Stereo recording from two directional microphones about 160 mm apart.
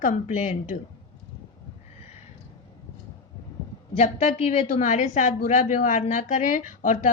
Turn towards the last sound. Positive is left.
turn(degrees=50)  # may be behind; listen again after turning